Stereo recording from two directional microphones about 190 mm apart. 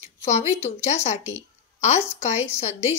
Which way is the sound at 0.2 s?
35° left (ahead or behind).